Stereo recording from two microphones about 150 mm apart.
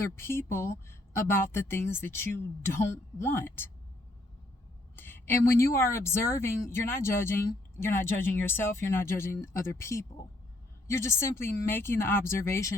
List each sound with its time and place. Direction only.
0.2 s speech: 15° left (ahead or behind)
4.9 s speech: 15° left (ahead or behind)